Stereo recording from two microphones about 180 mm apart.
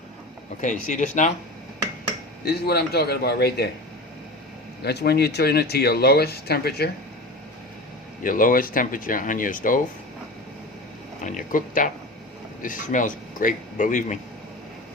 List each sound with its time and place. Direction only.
0.6 s speech: 45° left (ahead or behind)
2.4 s speech: 60° left (ahead or behind)
4.8 s speech: 65° left (ahead or behind)
8.2 s speech: 50° left (ahead or behind)
11.2 s speech: 45° left (ahead or behind)